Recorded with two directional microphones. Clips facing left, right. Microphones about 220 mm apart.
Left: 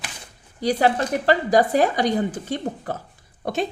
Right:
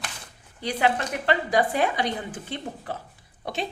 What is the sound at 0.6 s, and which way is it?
A woman's voice, 40° left (ahead or behind).